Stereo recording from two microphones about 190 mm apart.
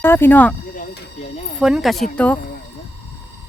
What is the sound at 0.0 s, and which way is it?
Speech, 10° left (ahead or behind).